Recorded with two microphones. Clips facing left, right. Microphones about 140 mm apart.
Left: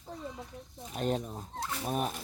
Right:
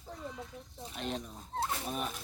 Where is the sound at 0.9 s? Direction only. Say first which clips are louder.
Left 7 dB; 45° left (ahead or behind).